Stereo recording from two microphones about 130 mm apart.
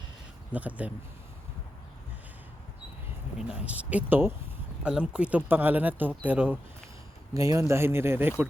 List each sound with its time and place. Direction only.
0.5 s speech: 10° right (ahead or behind)
3.3 s speech: 10° right (ahead or behind)
7.3 s speech: 25° right (ahead or behind)